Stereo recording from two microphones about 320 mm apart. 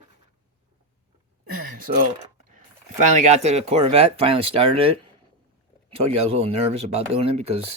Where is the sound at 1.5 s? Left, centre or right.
Right.